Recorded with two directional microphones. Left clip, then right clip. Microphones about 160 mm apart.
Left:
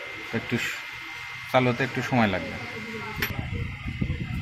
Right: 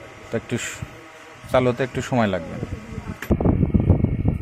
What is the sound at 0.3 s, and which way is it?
Speech, 45° right (ahead or behind).